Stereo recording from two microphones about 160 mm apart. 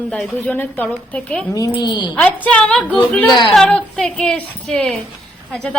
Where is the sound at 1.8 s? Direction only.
25° left (ahead or behind).